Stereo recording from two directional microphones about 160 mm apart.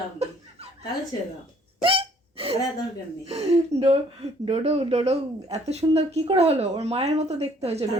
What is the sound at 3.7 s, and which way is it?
A woman's voice, 40° right (ahead or behind).